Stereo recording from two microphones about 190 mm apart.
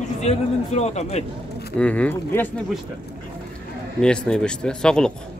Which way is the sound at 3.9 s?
5° left (ahead or behind).